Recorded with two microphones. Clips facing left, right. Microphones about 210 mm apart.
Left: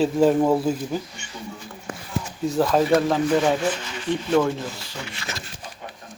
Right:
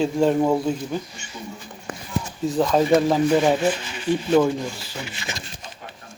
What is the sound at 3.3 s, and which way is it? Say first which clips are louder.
Speech: right 2 dB; 15° right (ahead or behind).